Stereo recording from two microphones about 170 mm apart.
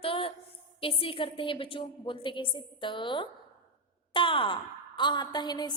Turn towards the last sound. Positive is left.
turn(degrees=25)  # may be behind; listen again after turning